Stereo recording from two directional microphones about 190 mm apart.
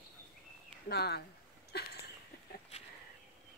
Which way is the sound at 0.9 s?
55° left (ahead or behind).